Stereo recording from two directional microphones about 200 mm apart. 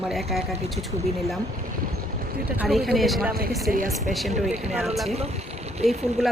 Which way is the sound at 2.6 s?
Centre (ahead or behind).